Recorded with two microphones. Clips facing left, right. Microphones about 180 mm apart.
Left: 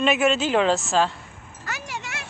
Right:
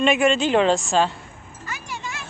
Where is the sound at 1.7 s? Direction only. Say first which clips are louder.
Even; 80° left.